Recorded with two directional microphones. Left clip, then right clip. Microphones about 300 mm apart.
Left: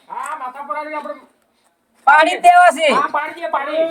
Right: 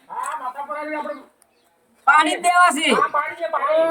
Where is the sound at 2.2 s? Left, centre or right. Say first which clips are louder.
Left 7 dB; centre.